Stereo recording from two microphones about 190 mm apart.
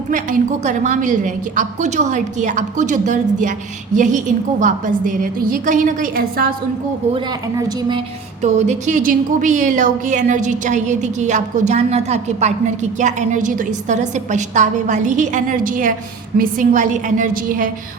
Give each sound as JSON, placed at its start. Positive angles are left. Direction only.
{"t": 0.1, "sound": "a woman's voice", "side_deg": -40}
{"t": 7.5, "sound": "a woman's voice", "side_deg": -25}
{"t": 8.4, "sound": "a woman's voice", "side_deg": -40}